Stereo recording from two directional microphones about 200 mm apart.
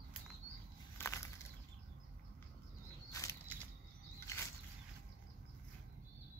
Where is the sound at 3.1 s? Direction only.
15° left (ahead or behind).